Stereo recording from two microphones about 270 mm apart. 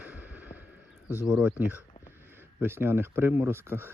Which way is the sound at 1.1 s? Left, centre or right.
Centre.